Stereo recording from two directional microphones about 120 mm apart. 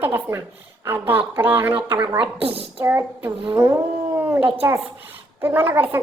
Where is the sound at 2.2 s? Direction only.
50° right (ahead or behind).